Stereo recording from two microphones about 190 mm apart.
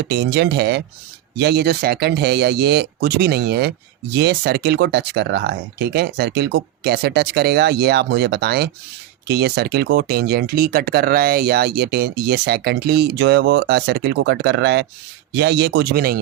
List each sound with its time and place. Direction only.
0.1 s speech: 60° right (ahead or behind)